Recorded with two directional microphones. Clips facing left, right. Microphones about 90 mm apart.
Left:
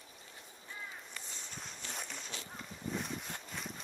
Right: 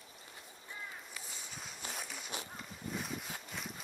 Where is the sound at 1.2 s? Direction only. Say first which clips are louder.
Even; 5° right (ahead or behind).